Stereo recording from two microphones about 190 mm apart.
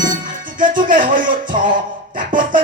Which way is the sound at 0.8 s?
45° right (ahead or behind).